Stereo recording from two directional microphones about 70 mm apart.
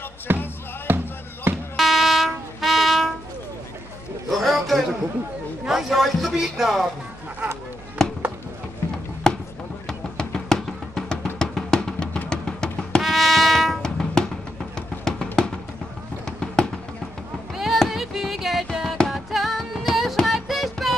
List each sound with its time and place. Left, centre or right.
0.3 s music: right
1.8 s music: centre
4.4 s a sound: centre
5.7 s speech: centre
8.0 s music: centre
9.3 s chop: centre
9.8 s music: centre
13.0 s music: centre
16.3 s fireworks: centre
17.6 s music: centre